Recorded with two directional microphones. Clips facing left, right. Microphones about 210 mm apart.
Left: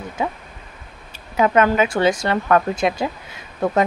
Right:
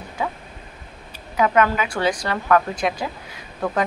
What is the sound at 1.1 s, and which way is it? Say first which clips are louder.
Speech: left 2 dB; 25° left (ahead or behind).